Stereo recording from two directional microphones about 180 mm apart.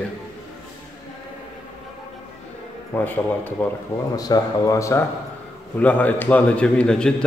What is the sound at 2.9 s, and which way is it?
A man's voice, 10° left (ahead or behind).